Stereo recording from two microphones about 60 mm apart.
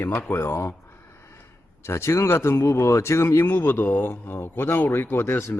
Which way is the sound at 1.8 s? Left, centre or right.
Left.